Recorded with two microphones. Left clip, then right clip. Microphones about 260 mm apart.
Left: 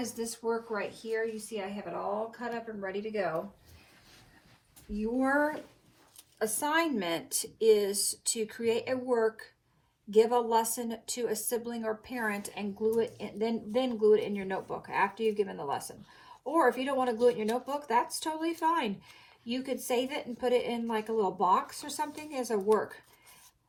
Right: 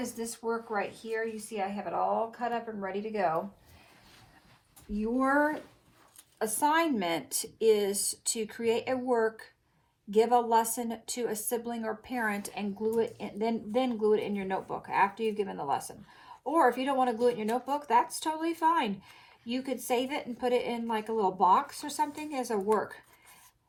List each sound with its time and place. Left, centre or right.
0.2 s speech: centre
4.9 s speech: right